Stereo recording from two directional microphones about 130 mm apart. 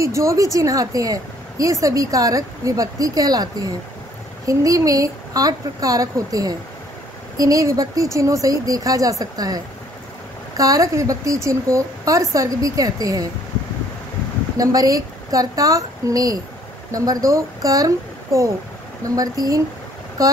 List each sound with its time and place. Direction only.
0.0 s a woman's voice: 25° right (ahead or behind)
10.6 s a woman's voice: 25° right (ahead or behind)
14.6 s a woman's voice: 30° right (ahead or behind)